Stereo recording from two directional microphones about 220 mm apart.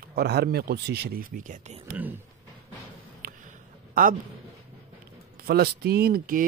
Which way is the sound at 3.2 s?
40° right (ahead or behind).